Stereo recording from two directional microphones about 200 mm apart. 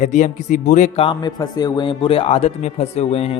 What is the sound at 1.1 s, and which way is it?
Speech, 20° left (ahead or behind).